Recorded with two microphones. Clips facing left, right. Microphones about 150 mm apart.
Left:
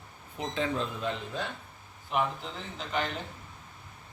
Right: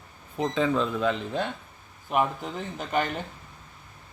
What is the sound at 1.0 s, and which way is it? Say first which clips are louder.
Speech: right 7 dB; 90° right.